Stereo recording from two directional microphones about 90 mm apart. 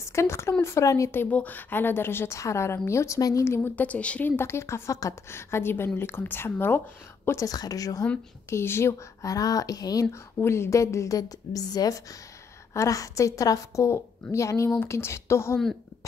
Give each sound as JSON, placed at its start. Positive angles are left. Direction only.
{"t": 0.0, "sound": "a woman's voice", "side_deg": 30}
{"t": 1.1, "sound": "a woman's voice", "side_deg": 20}
{"t": 3.4, "sound": "a woman's voice", "side_deg": 25}
{"t": 4.4, "sound": "a woman's voice", "side_deg": 30}
{"t": 7.2, "sound": "a woman's voice", "side_deg": 40}
{"t": 8.5, "sound": "a woman's voice", "side_deg": 30}
{"t": 10.4, "sound": "a woman's voice", "side_deg": 30}